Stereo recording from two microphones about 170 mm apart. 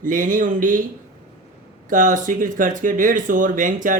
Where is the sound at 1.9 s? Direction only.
50° right (ahead or behind).